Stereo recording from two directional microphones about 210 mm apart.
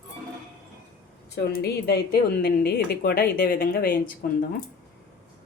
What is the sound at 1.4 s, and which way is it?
Speech, 50° left (ahead or behind).